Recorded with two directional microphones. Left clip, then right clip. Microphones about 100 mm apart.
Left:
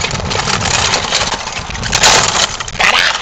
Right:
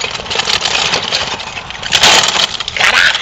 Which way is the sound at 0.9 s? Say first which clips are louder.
Left 1 dB; 50° left (ahead or behind).